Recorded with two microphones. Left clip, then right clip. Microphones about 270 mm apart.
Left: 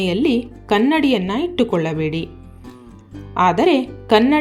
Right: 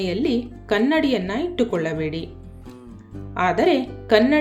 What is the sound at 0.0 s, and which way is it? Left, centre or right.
Speech, left.